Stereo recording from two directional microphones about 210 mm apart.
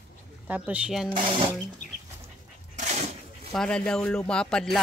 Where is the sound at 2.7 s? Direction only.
35° right (ahead or behind).